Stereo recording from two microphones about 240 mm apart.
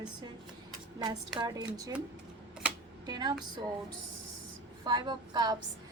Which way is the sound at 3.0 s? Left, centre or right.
Centre.